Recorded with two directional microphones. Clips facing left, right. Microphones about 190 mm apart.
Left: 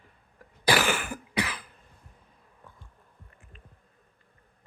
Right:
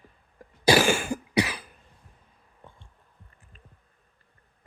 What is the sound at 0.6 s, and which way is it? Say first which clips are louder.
Cough: right 5 dB; 20° right (ahead or behind).